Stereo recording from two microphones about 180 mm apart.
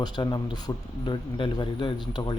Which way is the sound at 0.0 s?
20° left (ahead or behind).